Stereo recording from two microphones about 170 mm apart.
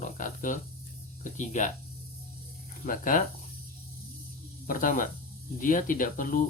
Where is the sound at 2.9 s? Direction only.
55° left (ahead or behind).